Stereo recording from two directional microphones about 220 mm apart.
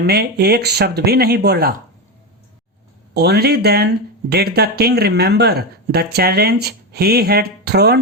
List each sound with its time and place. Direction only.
0.0 s speech: 45° right (ahead or behind)
3.2 s speech: 50° right (ahead or behind)